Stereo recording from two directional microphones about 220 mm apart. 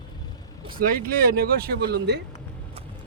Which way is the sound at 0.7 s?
40° right (ahead or behind).